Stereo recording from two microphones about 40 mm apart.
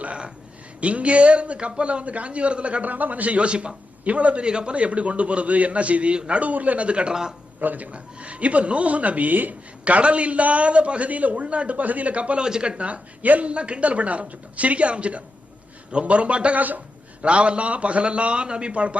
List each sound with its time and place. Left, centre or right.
0.0 s a sound: right
0.8 s a man's voice: right
6.4 s a man's voice: right
7.1 s a man's voice: centre
7.6 s a man's voice: right
7.9 s a man's voice: right
9.8 s a man's voice: right
13.5 s a man's voice: right
16.6 s a man's voice: right
17.2 s a man's voice: right